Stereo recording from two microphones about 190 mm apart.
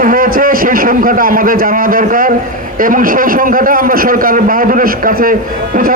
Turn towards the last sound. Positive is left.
turn(degrees=-50)  # may be behind; listen again after turning